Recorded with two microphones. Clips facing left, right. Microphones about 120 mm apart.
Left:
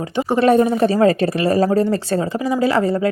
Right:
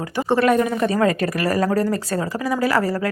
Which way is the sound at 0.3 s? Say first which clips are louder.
Left 4 dB; 30° left (ahead or behind).